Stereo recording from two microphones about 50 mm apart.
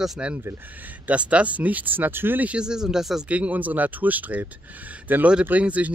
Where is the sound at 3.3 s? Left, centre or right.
Right.